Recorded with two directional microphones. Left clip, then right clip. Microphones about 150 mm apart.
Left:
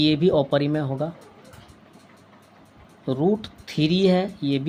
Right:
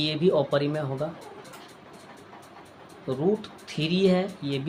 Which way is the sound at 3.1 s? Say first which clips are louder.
Left 3 dB; 50° left (ahead or behind).